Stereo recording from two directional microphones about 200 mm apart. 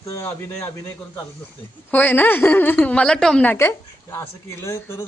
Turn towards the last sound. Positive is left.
turn(degrees=15)  # may be behind; listen again after turning